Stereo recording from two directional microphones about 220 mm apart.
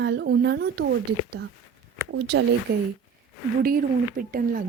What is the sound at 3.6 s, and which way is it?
Speech, 40° right (ahead or behind).